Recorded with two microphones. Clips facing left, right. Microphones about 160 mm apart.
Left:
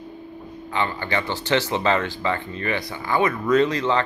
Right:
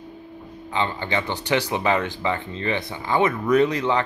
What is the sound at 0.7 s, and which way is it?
Speech, 20° right (ahead or behind).